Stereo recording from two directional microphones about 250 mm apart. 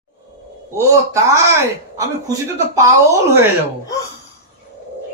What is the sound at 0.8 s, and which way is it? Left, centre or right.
Speech, centre.